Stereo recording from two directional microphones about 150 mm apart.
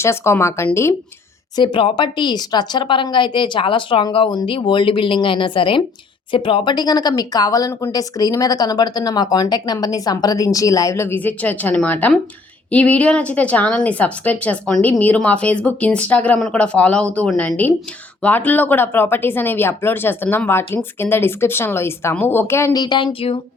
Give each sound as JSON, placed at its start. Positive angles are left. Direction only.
{"t": 0.0, "sound": "speech", "side_deg": 15}
{"t": 1.5, "sound": "speech", "side_deg": 35}